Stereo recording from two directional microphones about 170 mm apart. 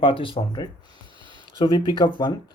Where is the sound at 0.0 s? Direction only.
30° left (ahead or behind).